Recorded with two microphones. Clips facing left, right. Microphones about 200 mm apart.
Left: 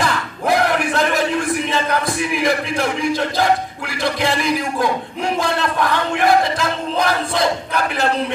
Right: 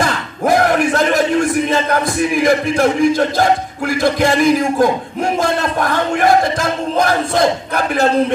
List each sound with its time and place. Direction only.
0.0 s battle cry: 45° right (ahead or behind)
1.7 s a man's voice: 45° right (ahead or behind)